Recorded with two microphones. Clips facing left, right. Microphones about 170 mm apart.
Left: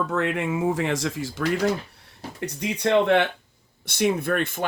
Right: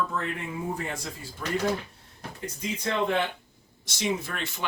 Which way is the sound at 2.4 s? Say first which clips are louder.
Left 7 dB; 70° left (ahead or behind).